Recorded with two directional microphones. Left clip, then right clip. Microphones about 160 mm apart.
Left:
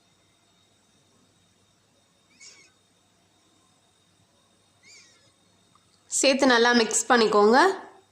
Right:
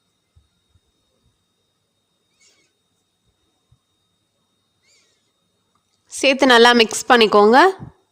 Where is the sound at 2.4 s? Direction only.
20° right (ahead or behind).